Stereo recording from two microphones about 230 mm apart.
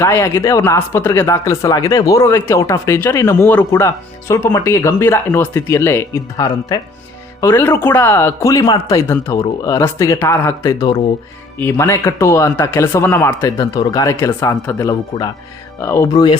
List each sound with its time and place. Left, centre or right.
0.0 s speech: centre